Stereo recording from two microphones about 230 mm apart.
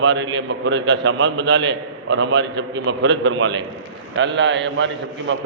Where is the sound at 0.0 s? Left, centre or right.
Right.